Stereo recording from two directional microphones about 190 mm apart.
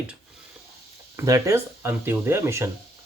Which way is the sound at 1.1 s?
15° right (ahead or behind).